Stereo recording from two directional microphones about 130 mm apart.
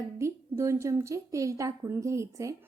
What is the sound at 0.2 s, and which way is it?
A woman's voice, 20° right (ahead or behind).